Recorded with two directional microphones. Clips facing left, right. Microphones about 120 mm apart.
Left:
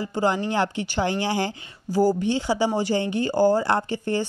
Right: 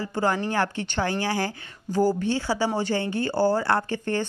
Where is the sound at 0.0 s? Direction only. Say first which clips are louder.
Left 2 dB; 15° left (ahead or behind).